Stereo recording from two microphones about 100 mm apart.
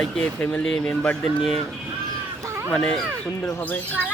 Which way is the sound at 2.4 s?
25° right (ahead or behind).